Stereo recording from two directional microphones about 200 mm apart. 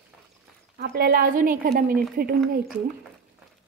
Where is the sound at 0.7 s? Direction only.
50° right (ahead or behind).